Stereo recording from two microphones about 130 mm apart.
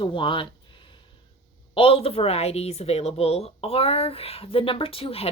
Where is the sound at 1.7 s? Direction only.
45° left (ahead or behind).